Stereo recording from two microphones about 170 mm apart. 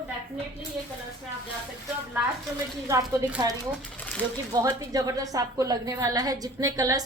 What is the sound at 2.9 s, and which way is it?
Speech, 20° right (ahead or behind).